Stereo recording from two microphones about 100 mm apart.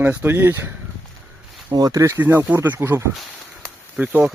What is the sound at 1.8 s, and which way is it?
Speech, 40° right (ahead or behind).